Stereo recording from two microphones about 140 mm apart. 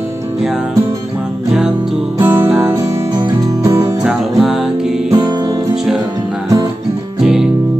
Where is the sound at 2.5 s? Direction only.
Centre (ahead or behind).